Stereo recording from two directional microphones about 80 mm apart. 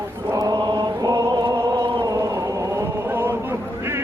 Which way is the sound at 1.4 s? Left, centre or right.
Right.